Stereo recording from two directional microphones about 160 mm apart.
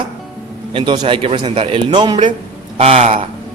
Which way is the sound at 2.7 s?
40° right (ahead or behind).